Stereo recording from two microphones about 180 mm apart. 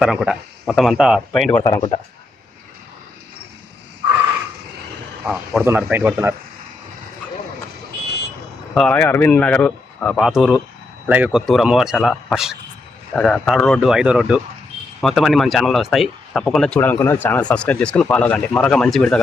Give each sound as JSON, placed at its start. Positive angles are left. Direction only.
{"t": 0.0, "sound": "speech", "side_deg": -5}
{"t": 1.6, "sound": "speech", "side_deg": 20}
{"t": 5.2, "sound": "speech", "side_deg": -5}
{"t": 8.7, "sound": "speech", "side_deg": 5}
{"t": 13.6, "sound": "speech", "side_deg": 10}
{"t": 13.8, "sound": "speech", "side_deg": -5}